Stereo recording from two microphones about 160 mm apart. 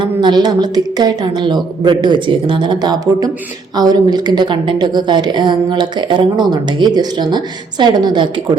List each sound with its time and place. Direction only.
0.0 s a woman's voice: 30° right (ahead or behind)